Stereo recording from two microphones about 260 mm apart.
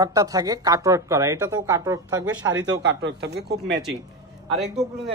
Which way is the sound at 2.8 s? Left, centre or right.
Right.